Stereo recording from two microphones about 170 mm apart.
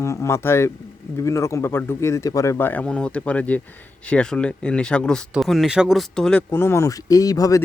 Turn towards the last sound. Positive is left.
turn(degrees=20)  # may be behind; listen again after turning